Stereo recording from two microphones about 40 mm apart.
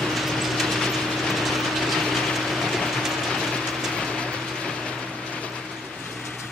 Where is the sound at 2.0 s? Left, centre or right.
Centre.